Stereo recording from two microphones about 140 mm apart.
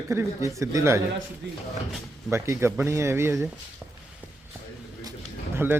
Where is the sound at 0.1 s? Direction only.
20° right (ahead or behind).